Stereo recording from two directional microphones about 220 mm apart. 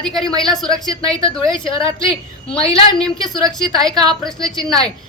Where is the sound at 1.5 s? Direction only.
20° left (ahead or behind).